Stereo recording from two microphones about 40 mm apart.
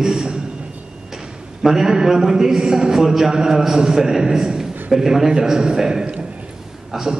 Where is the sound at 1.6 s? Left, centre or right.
Centre.